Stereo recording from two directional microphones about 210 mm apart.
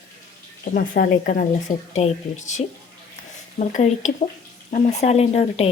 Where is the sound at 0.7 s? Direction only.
45° left (ahead or behind).